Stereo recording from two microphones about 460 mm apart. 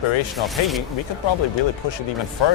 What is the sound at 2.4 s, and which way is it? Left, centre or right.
Speech, left.